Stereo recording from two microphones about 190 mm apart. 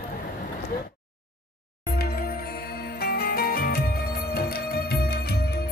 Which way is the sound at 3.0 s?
55° left (ahead or behind).